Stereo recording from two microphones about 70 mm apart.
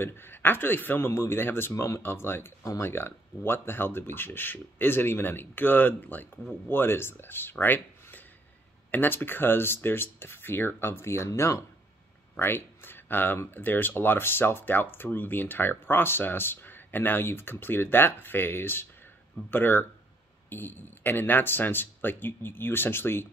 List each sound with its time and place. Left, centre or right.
0.0 s speech: left